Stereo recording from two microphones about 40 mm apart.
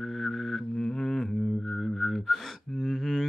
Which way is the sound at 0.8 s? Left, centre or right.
Centre.